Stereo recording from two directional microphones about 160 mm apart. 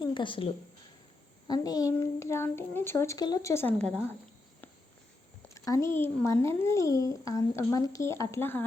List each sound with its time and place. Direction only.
0.0 s a woman's voice: 30° left (ahead or behind); by 4.0 s 5° left (ahead or behind)
5.5 s speech: 20° left (ahead or behind)